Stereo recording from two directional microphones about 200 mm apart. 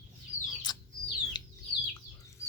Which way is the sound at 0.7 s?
20° left (ahead or behind).